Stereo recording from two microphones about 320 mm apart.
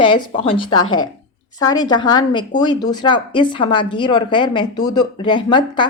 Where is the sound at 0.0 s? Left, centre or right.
Centre.